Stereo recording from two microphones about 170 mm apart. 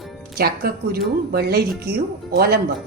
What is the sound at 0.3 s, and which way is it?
Speech, 65° right (ahead or behind).